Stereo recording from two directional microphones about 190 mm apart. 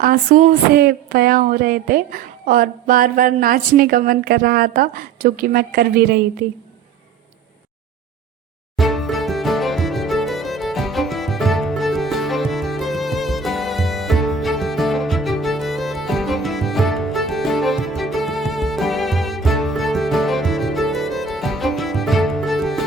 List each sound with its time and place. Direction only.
0.0 s speech: 50° right (ahead or behind)
8.7 s music: centre (ahead or behind)